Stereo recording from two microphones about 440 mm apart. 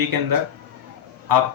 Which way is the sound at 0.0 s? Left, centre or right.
Right.